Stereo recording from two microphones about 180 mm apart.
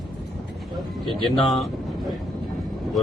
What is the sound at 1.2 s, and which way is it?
Speech, centre (ahead or behind).